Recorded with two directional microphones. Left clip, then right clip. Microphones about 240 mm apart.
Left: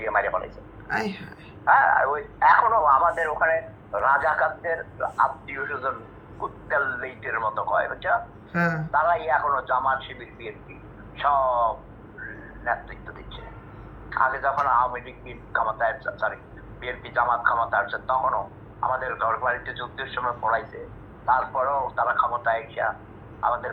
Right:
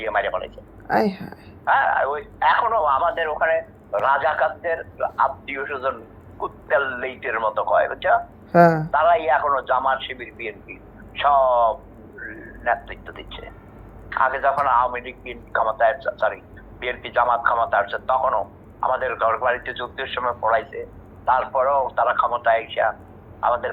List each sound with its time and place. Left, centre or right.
0.0 s a sound: centre
0.9 s speech: centre
12.6 s speech: centre